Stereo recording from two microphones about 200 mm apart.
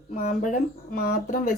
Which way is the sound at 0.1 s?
40° left (ahead or behind).